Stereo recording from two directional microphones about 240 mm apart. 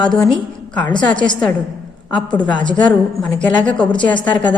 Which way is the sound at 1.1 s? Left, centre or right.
Centre.